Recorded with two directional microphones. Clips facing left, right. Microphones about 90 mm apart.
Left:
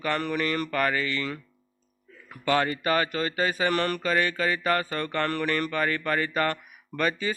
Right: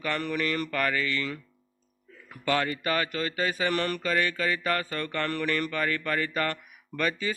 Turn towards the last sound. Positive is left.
turn(degrees=35)  # may be behind; listen again after turning